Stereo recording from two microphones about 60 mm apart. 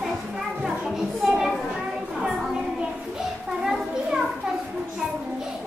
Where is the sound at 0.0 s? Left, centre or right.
Centre.